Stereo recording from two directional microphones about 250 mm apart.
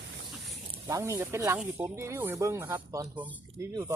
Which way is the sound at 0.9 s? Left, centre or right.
Centre.